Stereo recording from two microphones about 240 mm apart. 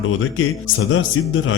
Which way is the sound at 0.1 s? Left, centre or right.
Left.